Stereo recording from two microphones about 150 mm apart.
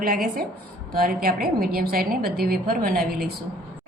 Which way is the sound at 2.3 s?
90° right.